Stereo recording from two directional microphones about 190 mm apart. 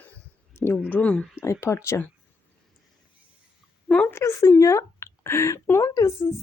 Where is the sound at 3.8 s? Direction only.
5° left (ahead or behind).